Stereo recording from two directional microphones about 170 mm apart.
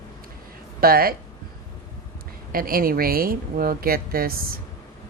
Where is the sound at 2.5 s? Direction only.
60° right (ahead or behind).